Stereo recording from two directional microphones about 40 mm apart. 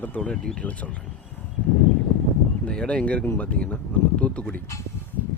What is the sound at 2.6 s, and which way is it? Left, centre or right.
Speech, left.